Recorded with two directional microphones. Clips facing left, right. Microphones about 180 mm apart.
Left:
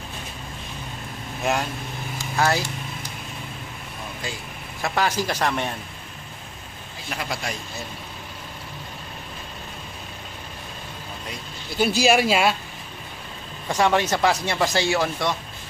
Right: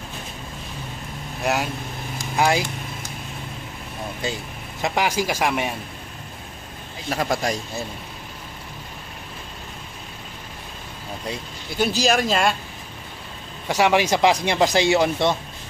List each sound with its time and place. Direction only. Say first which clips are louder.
1.4 s speech: right 1 dB; 5° right (ahead or behind)
2.3 s speech: right 2 dB; 15° right (ahead or behind)
4.8 s speech: right 1 dB; 15° right (ahead or behind)
7.1 s speech: right 7 dB; 40° right (ahead or behind)
11.8 s speech: left 1 dB; 10° left (ahead or behind)
13.7 s speech: right 2 dB; 10° right (ahead or behind)